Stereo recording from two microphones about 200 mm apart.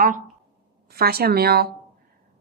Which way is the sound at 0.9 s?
50° right (ahead or behind).